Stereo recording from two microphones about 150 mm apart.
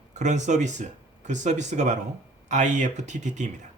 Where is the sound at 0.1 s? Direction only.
50° right (ahead or behind).